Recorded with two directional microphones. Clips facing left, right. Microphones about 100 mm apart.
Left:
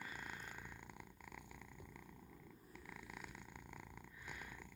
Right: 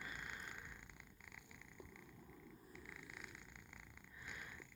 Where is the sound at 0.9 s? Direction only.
45° left (ahead or behind).